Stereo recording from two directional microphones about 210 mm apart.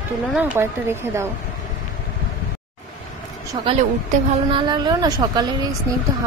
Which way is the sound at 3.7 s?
25° right (ahead or behind).